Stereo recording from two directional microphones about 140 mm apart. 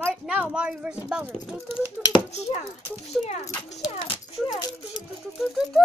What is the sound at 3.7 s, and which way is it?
Speech, 45° left (ahead or behind).